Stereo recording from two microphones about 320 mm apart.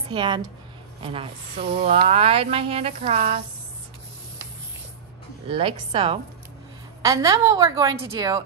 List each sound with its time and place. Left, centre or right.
0.1 s speech: centre
5.5 s speech: centre